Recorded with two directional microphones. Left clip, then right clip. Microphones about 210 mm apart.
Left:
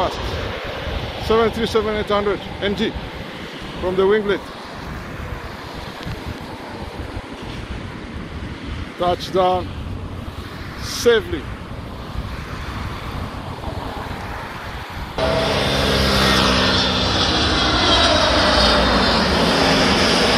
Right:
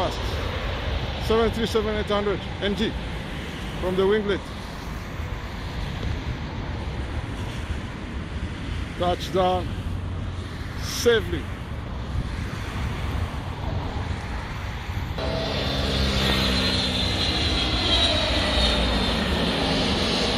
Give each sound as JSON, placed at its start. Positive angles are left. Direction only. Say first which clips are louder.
{"t": 0.1, "sound": "speech", "louder": "left 4 dB", "side_deg": 35}
{"t": 1.2, "sound": "speech", "louder": "left 5 dB", "side_deg": 0}
{"t": 4.0, "sound": "speech", "louder": "left 5 dB", "side_deg": 0}
{"t": 9.0, "sound": "speech", "louder": "left 5 dB", "side_deg": 5}
{"t": 10.9, "sound": "speech", "louder": "left 5 dB", "side_deg": 0}
{"t": 15.2, "sound": "vehicle", "louder": "left 9 dB", "side_deg": 0}
{"t": 15.7, "sound": "vehicle", "louder": "left 8 dB", "side_deg": 25}
{"t": 16.1, "sound": "vehicle", "louder": "left 7 dB", "side_deg": -5}